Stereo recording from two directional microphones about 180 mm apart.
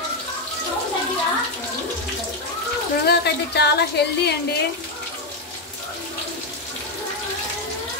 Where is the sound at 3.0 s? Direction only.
65° left (ahead or behind).